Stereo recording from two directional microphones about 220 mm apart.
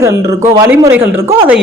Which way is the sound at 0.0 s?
15° right (ahead or behind).